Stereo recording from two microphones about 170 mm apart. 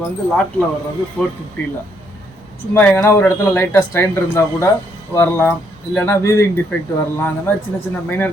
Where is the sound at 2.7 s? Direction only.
10° left (ahead or behind).